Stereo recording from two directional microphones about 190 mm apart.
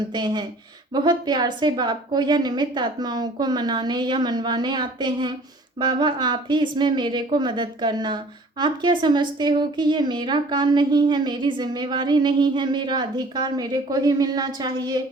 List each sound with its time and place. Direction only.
0.1 s speech: 20° right (ahead or behind)